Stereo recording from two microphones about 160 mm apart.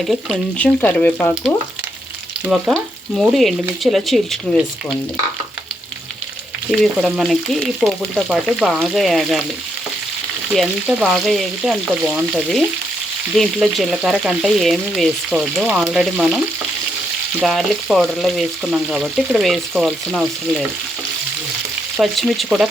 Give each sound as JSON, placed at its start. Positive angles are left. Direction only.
{"t": 0.1, "sound": "speech", "side_deg": 5}
{"t": 2.5, "sound": "frying", "side_deg": 0}
{"t": 6.7, "sound": "frying", "side_deg": 0}
{"t": 10.5, "sound": "frying", "side_deg": 0}
{"t": 17.4, "sound": "frying", "side_deg": 0}
{"t": 21.9, "sound": "frying", "side_deg": 0}